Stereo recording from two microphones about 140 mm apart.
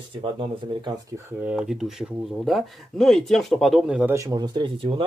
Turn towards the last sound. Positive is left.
turn(degrees=-35)  # may be behind; listen again after turning